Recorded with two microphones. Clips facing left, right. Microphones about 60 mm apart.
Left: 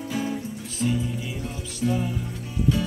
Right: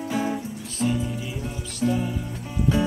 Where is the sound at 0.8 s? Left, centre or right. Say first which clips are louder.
Right 1 dB; centre.